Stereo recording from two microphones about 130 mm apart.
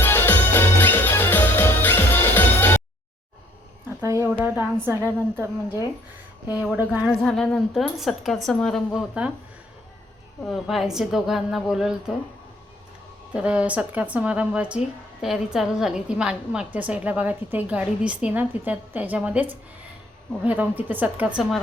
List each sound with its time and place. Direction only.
0.0 s music: 15° left (ahead or behind)
3.8 s a woman's voice: 20° right (ahead or behind)
6.7 s a woman's voice: 15° right (ahead or behind)
7.2 s a woman's voice: 5° left (ahead or behind)
10.4 s a woman's voice: centre (ahead or behind)
13.3 s a woman's voice: 10° right (ahead or behind)